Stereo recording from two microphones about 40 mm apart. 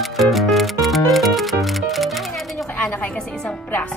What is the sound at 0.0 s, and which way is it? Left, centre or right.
Music, centre.